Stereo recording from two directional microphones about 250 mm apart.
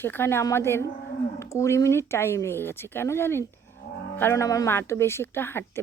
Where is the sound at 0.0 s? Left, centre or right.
Centre.